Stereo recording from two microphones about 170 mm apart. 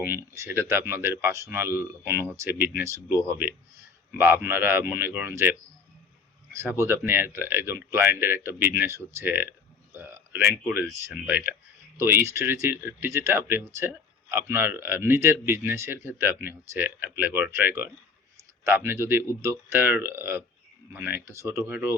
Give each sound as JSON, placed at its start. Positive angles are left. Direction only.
{"t": 0.0, "sound": "speech", "side_deg": -15}
{"t": 6.6, "sound": "speech", "side_deg": -15}